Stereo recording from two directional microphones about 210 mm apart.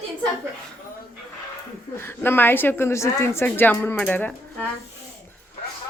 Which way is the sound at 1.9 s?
10° left (ahead or behind).